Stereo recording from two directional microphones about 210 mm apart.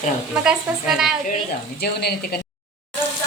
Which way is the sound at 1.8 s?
50° left (ahead or behind).